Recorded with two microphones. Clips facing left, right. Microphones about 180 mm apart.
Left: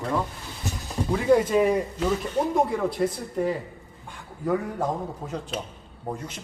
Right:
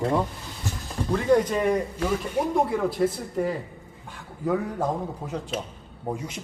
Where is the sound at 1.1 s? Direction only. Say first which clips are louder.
Left 1 dB; 5° left (ahead or behind).